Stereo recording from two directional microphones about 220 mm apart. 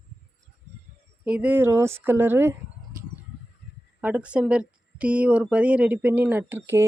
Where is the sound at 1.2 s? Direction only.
5° right (ahead or behind).